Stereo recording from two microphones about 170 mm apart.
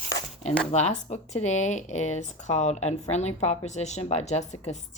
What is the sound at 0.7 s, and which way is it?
Speech, 40° left (ahead or behind).